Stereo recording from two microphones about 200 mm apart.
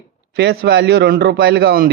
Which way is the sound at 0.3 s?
55° right (ahead or behind).